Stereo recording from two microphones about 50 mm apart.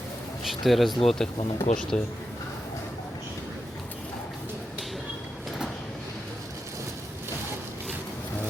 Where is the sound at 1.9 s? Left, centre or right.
Left.